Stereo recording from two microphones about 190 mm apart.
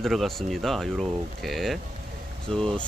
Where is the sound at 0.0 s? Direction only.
Centre (ahead or behind).